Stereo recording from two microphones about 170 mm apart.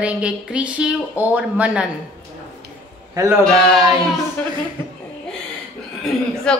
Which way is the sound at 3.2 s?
20° right (ahead or behind).